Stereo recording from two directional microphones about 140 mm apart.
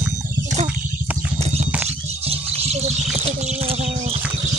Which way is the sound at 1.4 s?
50° right (ahead or behind).